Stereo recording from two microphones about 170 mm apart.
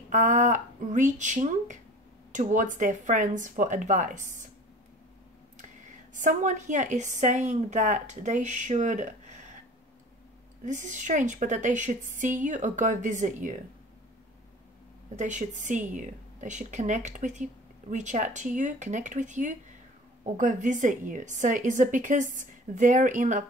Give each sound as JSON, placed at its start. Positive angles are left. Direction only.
{"t": 0.1, "sound": "a woman's voice", "side_deg": -45}
{"t": 6.1, "sound": "a woman's voice", "side_deg": -50}
{"t": 10.6, "sound": "a woman's voice", "side_deg": -45}
{"t": 15.1, "sound": "a woman's voice", "side_deg": -45}